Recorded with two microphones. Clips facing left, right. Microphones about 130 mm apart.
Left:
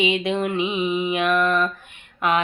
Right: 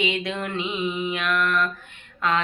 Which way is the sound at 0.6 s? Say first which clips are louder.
Left 4 dB; 20° left (ahead or behind).